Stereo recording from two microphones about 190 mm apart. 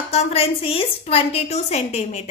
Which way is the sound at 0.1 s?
35° left (ahead or behind).